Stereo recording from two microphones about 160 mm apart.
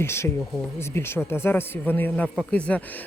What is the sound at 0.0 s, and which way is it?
Speech, 15° left (ahead or behind).